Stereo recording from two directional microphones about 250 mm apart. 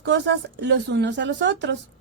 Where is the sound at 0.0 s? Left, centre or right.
Right.